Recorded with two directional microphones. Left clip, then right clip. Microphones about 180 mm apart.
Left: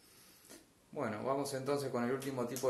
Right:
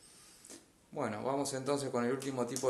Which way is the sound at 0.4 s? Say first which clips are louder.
Right 3 dB; 25° right (ahead or behind).